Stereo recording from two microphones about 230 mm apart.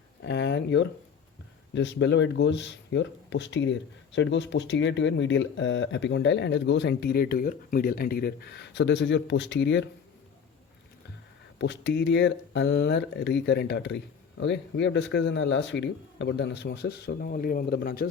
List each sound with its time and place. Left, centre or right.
0.2 s speech: left
11.6 s speech: left